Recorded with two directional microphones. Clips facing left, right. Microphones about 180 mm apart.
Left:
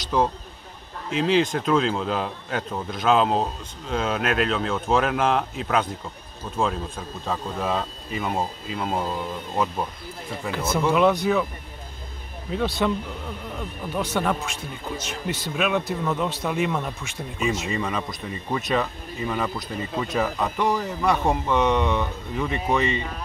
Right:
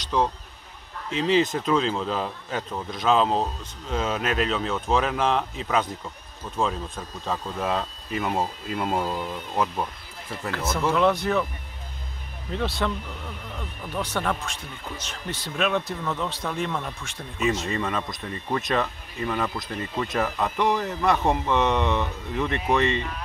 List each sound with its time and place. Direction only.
0.0 s speech: 5° left (ahead or behind)
10.5 s speech: 10° left (ahead or behind)
12.6 s speech: 20° left (ahead or behind); by 22.9 s centre (ahead or behind)